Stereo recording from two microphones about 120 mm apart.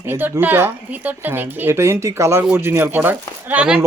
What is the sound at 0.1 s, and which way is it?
A woman's voice, 15° right (ahead or behind).